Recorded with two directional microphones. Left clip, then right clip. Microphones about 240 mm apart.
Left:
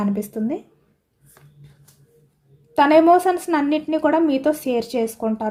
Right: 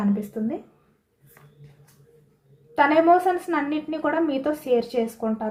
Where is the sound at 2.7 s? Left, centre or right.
Left.